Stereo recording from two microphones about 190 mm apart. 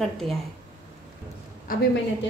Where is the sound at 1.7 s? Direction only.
50° left (ahead or behind).